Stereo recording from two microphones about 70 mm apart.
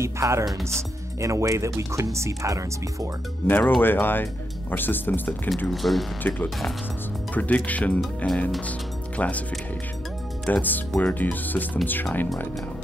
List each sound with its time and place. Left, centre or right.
0.0 s speech: right
3.4 s speech: left
5.7 s speech: centre
6.2 s speech: left
10.5 s speech: left